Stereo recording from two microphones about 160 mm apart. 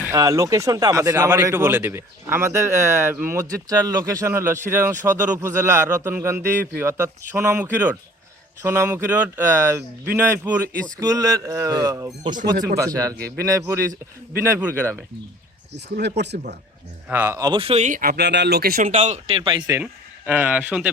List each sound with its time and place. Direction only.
0.1 s speech: 20° right (ahead or behind)
16.0 s speech: 90° right
17.1 s speech: 15° right (ahead or behind)
17.4 s speech: 30° right (ahead or behind); by 18.8 s 80° right
18.8 s speech: 45° right (ahead or behind)
19.4 s speech: 25° right (ahead or behind)
19.8 s speech: 10° right (ahead or behind)